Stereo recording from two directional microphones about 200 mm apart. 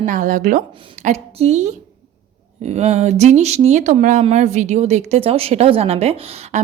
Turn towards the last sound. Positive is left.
turn(degrees=-30)  # may be behind; listen again after turning